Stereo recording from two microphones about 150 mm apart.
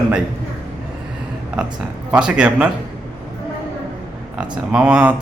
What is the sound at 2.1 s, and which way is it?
Speech, 5° right (ahead or behind).